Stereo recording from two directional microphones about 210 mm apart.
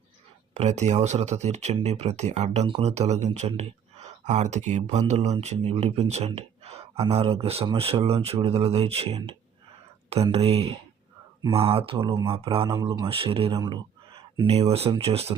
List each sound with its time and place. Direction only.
0.5 s speech: 30° right (ahead or behind)